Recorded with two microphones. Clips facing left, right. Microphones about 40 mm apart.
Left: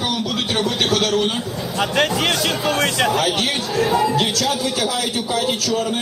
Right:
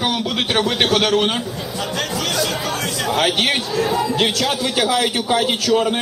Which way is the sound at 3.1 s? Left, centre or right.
Right.